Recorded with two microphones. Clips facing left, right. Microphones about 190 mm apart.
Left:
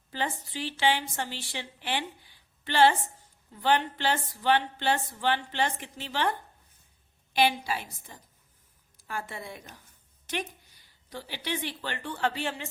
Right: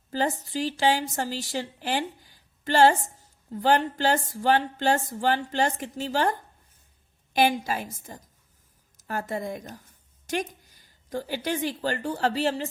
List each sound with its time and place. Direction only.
0.1 s a woman's voice: 40° right (ahead or behind)